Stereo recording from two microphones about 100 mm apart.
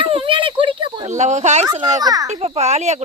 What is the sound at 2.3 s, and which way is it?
Speech, 90° right.